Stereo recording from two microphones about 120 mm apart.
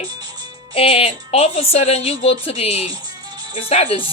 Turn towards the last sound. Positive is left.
turn(degrees=55)  # may be behind; listen again after turning